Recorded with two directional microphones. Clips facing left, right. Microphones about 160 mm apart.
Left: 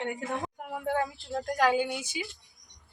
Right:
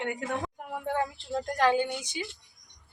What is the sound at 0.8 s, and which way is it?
A woman's voice, 5° left (ahead or behind).